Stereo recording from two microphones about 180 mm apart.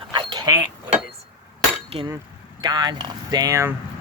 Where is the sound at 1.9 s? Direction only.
35° right (ahead or behind).